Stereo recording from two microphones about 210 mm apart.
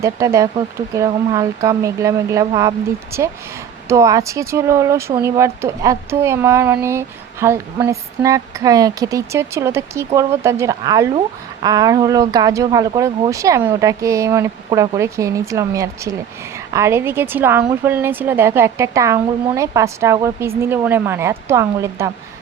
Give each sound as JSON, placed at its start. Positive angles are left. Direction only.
{"t": 0.0, "sound": "speech", "side_deg": -15}